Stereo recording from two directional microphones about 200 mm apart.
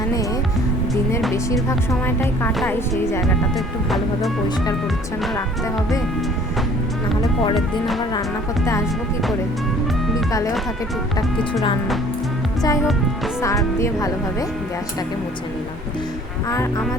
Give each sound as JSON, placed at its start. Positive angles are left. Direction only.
{"t": 2.0, "sound": "speech", "side_deg": 10}
{"t": 3.8, "sound": "speech", "side_deg": 0}
{"t": 7.5, "sound": "speech", "side_deg": 0}
{"t": 12.6, "sound": "speech", "side_deg": 15}
{"t": 16.5, "sound": "speech", "side_deg": 15}